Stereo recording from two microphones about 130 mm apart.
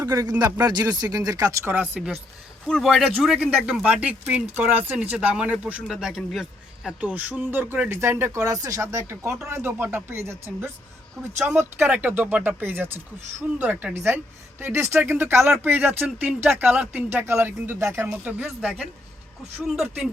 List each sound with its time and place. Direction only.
0.0 s speech: 25° right (ahead or behind)
1.7 s speech: 10° right (ahead or behind)
2.6 s speech: centre (ahead or behind)